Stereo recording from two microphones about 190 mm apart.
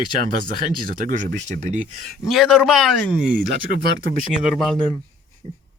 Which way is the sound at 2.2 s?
Centre (ahead or behind).